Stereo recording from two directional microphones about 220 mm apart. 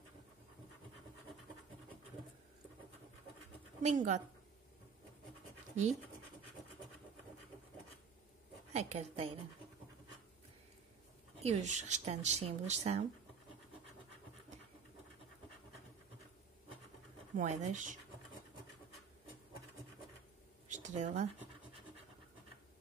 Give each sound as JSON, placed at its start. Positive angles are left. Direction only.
{"t": 3.8, "sound": "speech", "side_deg": -35}
{"t": 8.7, "sound": "a woman's voice", "side_deg": -30}
{"t": 11.4, "sound": "speech", "side_deg": -30}
{"t": 17.4, "sound": "speech", "side_deg": -35}
{"t": 20.6, "sound": "a sound", "side_deg": -35}